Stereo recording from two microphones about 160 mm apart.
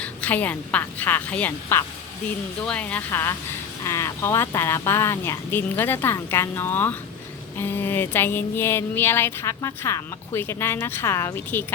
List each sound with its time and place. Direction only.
0.0 s speech: 10° left (ahead or behind)